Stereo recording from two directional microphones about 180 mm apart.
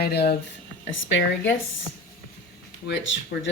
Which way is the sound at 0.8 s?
90° left.